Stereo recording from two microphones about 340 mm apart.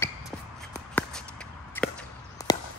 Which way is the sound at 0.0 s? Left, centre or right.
Centre.